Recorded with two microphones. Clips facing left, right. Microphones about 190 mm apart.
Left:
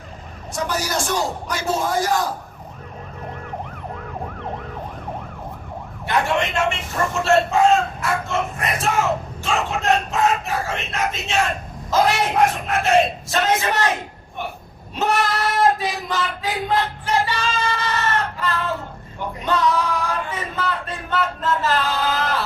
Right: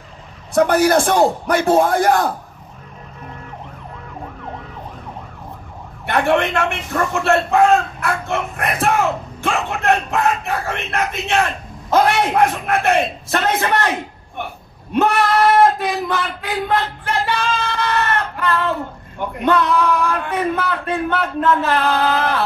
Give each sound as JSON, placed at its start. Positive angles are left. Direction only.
{"t": 0.6, "sound": "a man's voice", "side_deg": -60}
{"t": 6.0, "sound": "a man's voice", "side_deg": -60}